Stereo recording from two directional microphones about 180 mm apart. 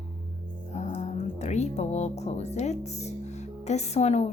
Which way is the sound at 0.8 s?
40° left (ahead or behind).